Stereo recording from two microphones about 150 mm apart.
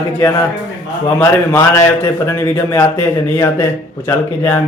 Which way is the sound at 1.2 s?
20° left (ahead or behind).